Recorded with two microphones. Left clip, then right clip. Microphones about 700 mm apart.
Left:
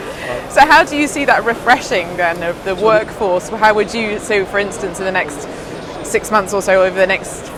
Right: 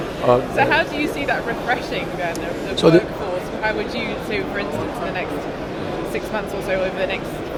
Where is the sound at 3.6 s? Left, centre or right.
Left.